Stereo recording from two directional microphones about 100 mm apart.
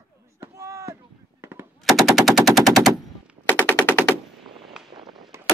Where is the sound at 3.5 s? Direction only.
20° left (ahead or behind).